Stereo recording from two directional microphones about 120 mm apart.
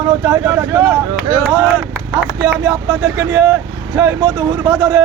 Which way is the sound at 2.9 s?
20° right (ahead or behind).